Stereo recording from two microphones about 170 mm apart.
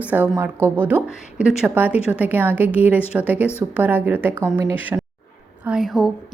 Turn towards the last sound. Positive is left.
turn(degrees=0)  # may be behind; listen again after turning